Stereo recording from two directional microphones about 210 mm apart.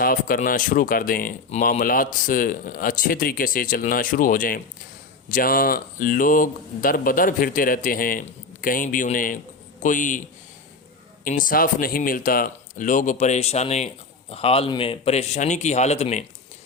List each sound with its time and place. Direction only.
0.0 s speech: 40° left (ahead or behind)